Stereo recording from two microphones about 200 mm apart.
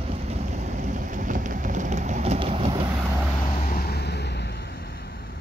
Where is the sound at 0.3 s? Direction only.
35° right (ahead or behind).